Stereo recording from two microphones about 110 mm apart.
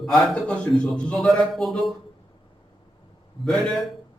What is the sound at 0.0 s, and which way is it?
A man's voice, 5° left (ahead or behind).